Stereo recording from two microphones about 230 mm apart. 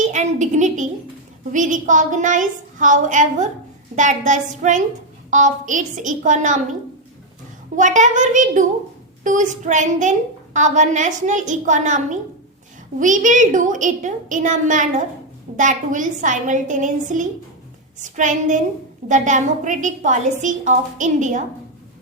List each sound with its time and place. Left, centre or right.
0.0 s a sound: right
1.5 s a woman's voice: right
7.8 s a woman's voice: right